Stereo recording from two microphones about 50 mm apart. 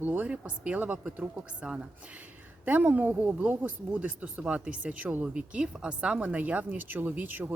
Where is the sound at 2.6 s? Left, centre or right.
Right.